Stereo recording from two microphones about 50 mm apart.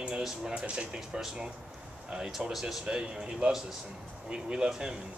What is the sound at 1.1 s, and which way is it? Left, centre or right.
Speech, centre.